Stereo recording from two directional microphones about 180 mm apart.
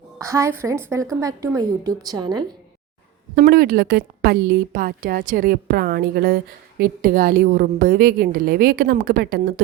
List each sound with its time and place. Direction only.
0.2 s a woman's voice: 15° right (ahead or behind)
3.3 s a woman's voice: 55° right (ahead or behind)